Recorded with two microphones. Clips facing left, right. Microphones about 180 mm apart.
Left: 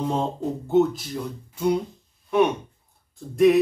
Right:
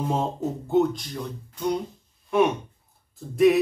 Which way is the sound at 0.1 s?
5° right (ahead or behind).